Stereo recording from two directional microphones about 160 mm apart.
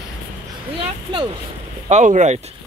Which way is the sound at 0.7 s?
35° right (ahead or behind).